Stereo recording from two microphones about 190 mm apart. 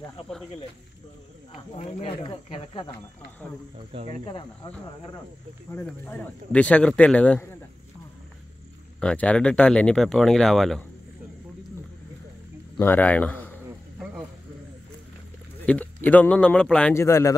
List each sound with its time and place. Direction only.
1.5 s speech: 35° left (ahead or behind)
4.1 s speech: 25° left (ahead or behind)
5.7 s speech: 10° left (ahead or behind)
9.0 s speech: 5° left (ahead or behind)
12.7 s speech: 10° left (ahead or behind)
15.6 s speech: 10° left (ahead or behind)